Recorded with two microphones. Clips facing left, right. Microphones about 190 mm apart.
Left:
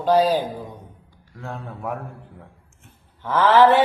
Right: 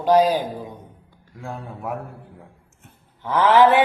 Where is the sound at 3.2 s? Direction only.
15° right (ahead or behind).